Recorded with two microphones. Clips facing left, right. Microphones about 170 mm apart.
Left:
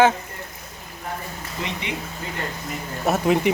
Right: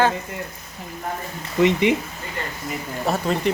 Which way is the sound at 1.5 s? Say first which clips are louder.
Right 14 dB; 60° right (ahead or behind).